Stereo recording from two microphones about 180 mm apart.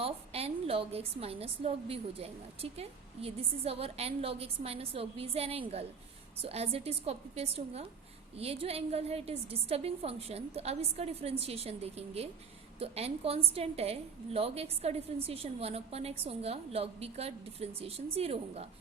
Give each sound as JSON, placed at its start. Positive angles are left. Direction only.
{"t": 0.0, "sound": "a woman's voice", "side_deg": -35}